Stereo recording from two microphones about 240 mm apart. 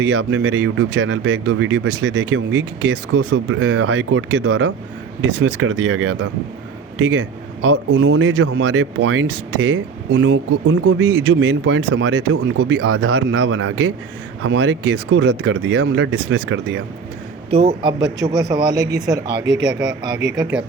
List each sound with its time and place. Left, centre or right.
0.0 s speech: right
17.5 s a man's voice: right
18.3 s speech: centre